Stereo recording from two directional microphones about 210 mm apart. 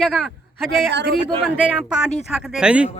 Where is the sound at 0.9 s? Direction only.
55° right (ahead or behind).